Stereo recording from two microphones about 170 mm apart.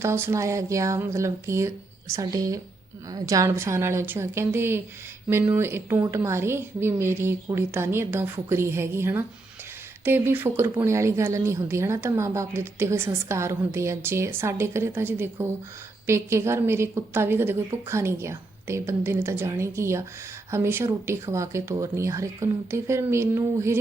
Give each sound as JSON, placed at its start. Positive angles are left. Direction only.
{"t": 0.0, "sound": "a woman's voice", "side_deg": -15}